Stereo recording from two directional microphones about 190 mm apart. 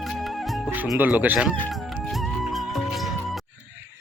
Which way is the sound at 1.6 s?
5° left (ahead or behind).